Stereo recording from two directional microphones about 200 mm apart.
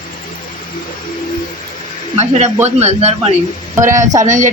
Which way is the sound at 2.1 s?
35° right (ahead or behind).